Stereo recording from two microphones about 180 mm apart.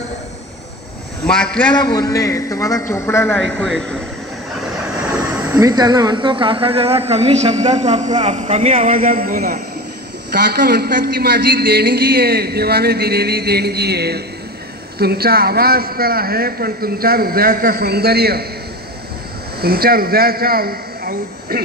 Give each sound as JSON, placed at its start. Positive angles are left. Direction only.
{"t": 1.2, "sound": "a man's voice", "side_deg": 5}
{"t": 2.0, "sound": "a man's voice", "side_deg": 20}
{"t": 3.5, "sound": "speech", "side_deg": 0}
{"t": 5.5, "sound": "speech", "side_deg": -20}
{"t": 8.9, "sound": "speech", "side_deg": -50}
{"t": 10.3, "sound": "a man's voice", "side_deg": -60}
{"t": 19.6, "sound": "a man's voice", "side_deg": -55}